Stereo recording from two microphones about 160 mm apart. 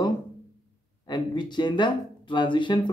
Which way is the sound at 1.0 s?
25° left (ahead or behind).